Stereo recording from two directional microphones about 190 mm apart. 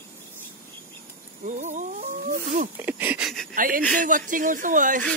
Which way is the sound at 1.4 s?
40° right (ahead or behind).